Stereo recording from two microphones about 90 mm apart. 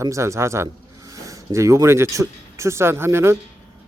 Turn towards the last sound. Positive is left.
turn(degrees=-30)  # may be behind; listen again after turning